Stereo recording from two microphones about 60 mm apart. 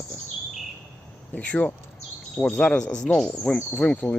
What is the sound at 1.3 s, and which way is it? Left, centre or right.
Speech, left.